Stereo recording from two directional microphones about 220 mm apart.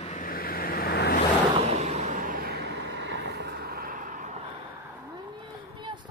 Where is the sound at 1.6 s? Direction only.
30° right (ahead or behind).